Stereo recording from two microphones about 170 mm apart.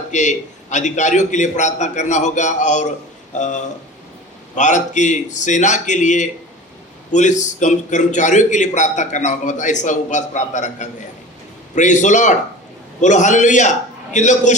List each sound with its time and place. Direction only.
0.1 s a man's voice: 45° left (ahead or behind)